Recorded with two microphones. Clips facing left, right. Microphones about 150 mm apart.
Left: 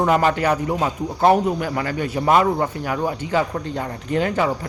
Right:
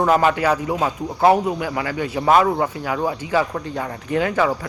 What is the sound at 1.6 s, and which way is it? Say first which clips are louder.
Speech: even; 40° left (ahead or behind).